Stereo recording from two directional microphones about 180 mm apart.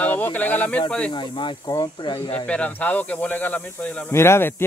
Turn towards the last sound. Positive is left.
turn(degrees=15)  # may be behind; listen again after turning